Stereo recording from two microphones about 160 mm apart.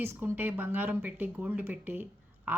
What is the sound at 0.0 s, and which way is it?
Speech, 15° right (ahead or behind).